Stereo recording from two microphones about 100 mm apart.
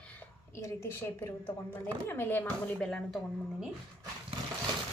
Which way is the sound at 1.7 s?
20° left (ahead or behind).